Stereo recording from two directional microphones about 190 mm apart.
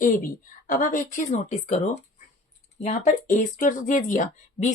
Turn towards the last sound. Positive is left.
turn(degrees=40)  # may be behind; listen again after turning